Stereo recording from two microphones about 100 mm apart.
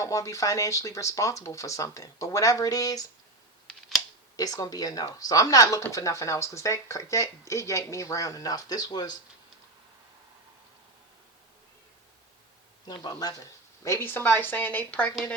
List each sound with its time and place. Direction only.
0.0 s speech: 30° left (ahead or behind)
3.7 s scissors: centre (ahead or behind)
4.4 s speech: 40° left (ahead or behind)
12.9 s speech: 40° left (ahead or behind)
13.8 s a woman's voice: 25° left (ahead or behind)